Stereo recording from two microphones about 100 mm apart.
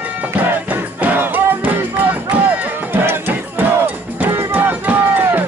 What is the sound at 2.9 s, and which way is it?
Cowbell, 20° right (ahead or behind).